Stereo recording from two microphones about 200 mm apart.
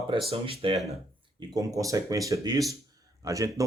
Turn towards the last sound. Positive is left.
turn(degrees=-15)  # may be behind; listen again after turning